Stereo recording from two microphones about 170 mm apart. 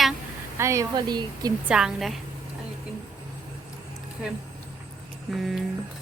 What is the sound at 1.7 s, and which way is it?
Speech, 5° right (ahead or behind).